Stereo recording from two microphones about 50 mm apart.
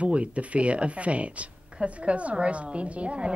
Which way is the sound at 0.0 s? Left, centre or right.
Right.